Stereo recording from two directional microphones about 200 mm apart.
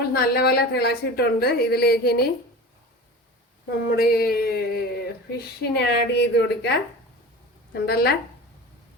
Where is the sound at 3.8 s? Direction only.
50° left (ahead or behind).